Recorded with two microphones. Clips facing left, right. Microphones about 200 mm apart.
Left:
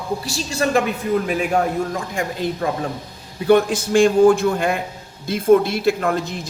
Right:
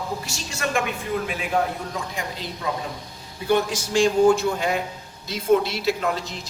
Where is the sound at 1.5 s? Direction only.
50° left (ahead or behind).